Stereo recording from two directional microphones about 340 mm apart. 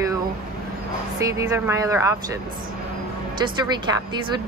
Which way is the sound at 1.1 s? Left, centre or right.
Centre.